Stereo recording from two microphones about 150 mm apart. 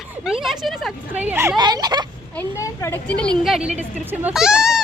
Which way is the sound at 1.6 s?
25° right (ahead or behind).